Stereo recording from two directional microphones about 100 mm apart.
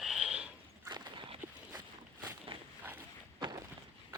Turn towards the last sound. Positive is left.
turn(degrees=-45)  # may be behind; listen again after turning